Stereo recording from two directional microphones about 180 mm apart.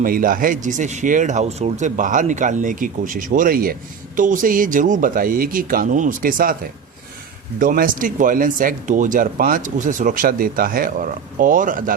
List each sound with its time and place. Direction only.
0.0 s speech: 50° right (ahead or behind)
7.6 s speech: 50° right (ahead or behind)